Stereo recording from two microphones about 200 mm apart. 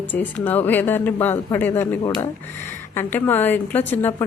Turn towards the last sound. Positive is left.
turn(degrees=10)  # may be behind; listen again after turning